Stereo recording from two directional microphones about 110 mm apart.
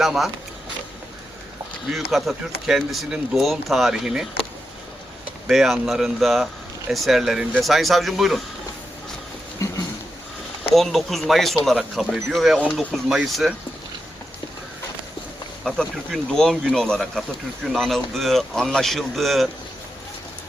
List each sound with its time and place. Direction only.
0.0 s speech: centre (ahead or behind)
1.9 s speech: centre (ahead or behind)
5.5 s speech: centre (ahead or behind)
9.6 s a sound: 25° left (ahead or behind)
10.8 s speech: centre (ahead or behind)
15.6 s speech: 5° left (ahead or behind)